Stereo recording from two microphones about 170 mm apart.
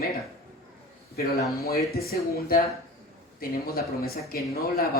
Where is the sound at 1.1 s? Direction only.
65° left (ahead or behind).